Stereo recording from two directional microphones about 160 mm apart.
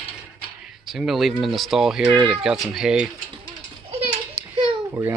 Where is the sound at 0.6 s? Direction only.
Centre (ahead or behind).